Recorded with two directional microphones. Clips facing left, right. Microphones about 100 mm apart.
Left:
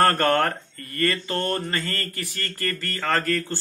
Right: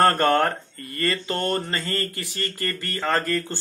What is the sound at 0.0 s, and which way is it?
Speech, 15° right (ahead or behind).